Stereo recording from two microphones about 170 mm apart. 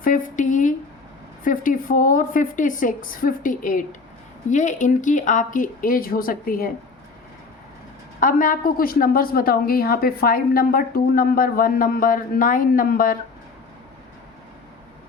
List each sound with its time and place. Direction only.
0.0 s a woman's voice: 50° left (ahead or behind)
8.2 s a woman's voice: 55° left (ahead or behind)